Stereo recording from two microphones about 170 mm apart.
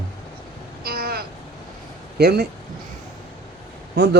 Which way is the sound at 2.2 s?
70° right (ahead or behind).